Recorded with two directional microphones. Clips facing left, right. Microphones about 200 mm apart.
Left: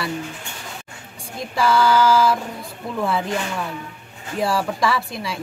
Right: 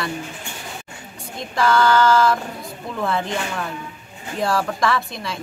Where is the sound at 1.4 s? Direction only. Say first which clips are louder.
Even; 5° left (ahead or behind).